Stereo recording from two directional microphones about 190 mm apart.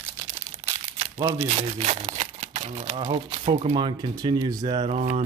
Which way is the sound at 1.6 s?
35° right (ahead or behind).